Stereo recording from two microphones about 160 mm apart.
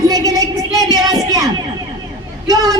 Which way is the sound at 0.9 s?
25° right (ahead or behind).